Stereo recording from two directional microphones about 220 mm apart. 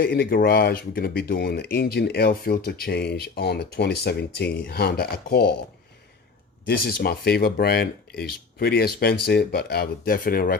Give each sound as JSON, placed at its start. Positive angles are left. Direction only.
{"t": 0.0, "sound": "speech", "side_deg": 45}
{"t": 6.7, "sound": "speech", "side_deg": 45}